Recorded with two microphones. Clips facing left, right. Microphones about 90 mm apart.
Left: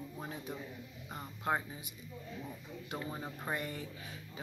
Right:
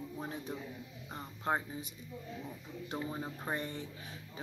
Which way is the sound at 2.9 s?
15° right (ahead or behind).